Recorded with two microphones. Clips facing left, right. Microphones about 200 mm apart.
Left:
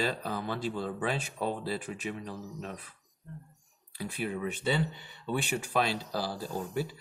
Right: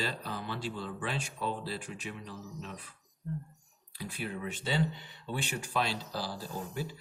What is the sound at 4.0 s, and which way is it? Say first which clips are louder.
Speech: left 4 dB; 55° left (ahead or behind).